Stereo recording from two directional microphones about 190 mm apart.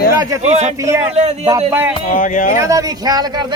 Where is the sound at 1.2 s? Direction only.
35° right (ahead or behind).